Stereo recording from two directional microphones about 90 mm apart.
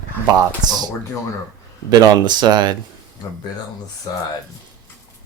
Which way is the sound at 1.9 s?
55° right (ahead or behind).